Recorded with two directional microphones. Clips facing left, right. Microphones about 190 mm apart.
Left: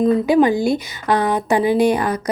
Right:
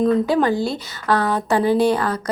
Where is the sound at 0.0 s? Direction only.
15° left (ahead or behind).